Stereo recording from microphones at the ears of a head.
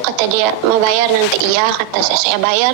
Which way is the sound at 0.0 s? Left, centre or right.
Right.